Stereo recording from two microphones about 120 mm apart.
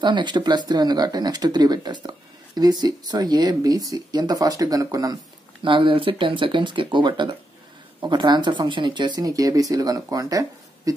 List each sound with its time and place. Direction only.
0.0 s speech: 40° right (ahead or behind)
5.6 s speech: 45° right (ahead or behind); by 10.4 s 30° right (ahead or behind)